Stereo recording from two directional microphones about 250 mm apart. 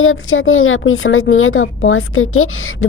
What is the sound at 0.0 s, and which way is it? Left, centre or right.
A woman's voice, left.